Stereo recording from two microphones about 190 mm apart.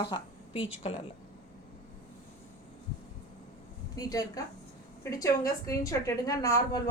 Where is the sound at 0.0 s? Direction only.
25° left (ahead or behind).